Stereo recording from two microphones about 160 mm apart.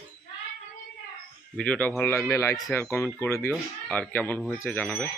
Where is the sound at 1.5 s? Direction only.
5° left (ahead or behind).